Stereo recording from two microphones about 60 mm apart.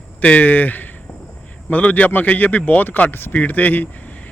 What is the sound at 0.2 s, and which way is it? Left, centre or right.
A man's voice, left.